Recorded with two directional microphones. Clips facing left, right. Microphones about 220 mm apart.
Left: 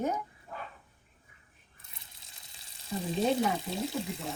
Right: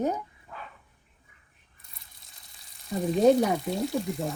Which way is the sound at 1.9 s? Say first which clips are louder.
Left 1 dB; centre (ahead or behind).